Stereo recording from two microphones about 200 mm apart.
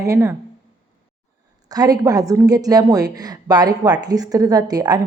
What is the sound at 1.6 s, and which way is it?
A woman's voice, 20° right (ahead or behind).